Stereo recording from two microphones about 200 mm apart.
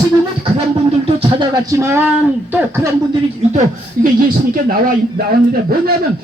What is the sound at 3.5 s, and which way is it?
Speech, 40° right (ahead or behind).